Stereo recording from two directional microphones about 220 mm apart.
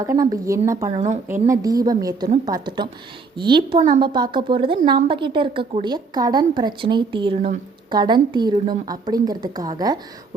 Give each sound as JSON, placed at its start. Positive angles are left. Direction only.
{"t": 0.0, "sound": "a woman's voice", "side_deg": -15}